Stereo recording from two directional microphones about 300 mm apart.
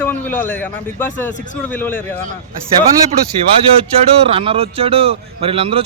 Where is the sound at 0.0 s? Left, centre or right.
Centre.